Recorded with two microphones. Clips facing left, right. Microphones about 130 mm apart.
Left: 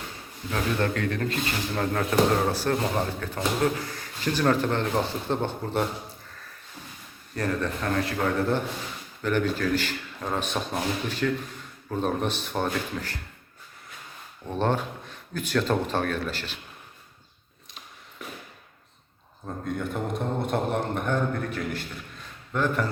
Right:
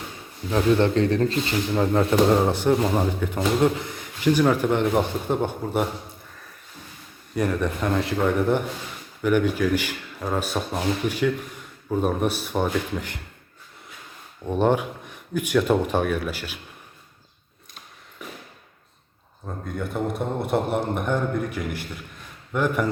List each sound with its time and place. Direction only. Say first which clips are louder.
0.5 s speech: right 7 dB; 25° right (ahead or behind)
1.7 s a man's voice: right 5 dB; 20° right (ahead or behind)
7.3 s a man's voice: right 4 dB; 15° right (ahead or behind)
14.4 s a man's voice: right 5 dB; 15° right (ahead or behind)
19.6 s a man's voice: right 2 dB; 5° right (ahead or behind)